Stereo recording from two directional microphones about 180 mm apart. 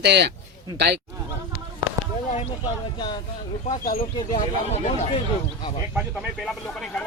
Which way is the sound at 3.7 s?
50° left (ahead or behind).